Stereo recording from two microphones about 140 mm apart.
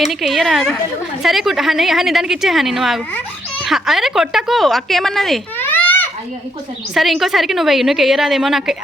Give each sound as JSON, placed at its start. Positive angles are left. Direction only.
{"t": 0.1, "sound": "a woman's voice", "side_deg": 0}
{"t": 5.5, "sound": "a sound", "side_deg": 15}
{"t": 6.9, "sound": "a woman's voice", "side_deg": 0}